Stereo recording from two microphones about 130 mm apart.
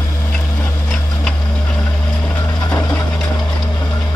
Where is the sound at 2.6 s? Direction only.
30° left (ahead or behind).